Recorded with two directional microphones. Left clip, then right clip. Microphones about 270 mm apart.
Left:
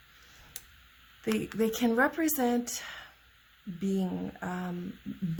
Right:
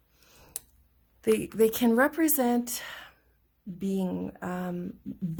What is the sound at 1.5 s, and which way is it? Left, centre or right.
A woman's voice, right.